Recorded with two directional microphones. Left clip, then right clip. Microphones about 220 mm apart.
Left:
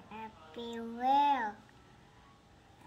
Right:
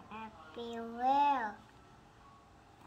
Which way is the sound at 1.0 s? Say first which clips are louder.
Left 1 dB; 25° left (ahead or behind).